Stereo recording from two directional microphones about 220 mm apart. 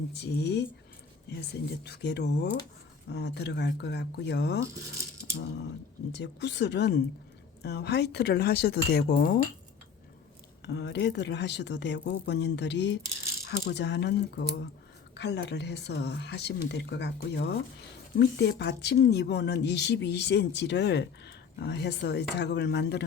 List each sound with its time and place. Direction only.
0.1 s speech: 50° left (ahead or behind)
1.8 s speech: 50° left (ahead or behind)
6.1 s speech: 50° left (ahead or behind)
10.6 s speech: 50° left (ahead or behind)